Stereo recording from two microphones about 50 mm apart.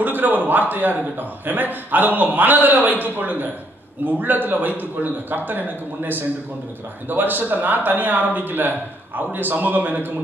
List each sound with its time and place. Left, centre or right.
0.0 s speech: right